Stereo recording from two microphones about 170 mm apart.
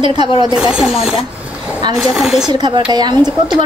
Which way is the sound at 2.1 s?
Centre (ahead or behind).